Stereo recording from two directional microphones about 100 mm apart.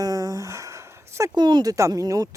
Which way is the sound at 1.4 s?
45° right (ahead or behind).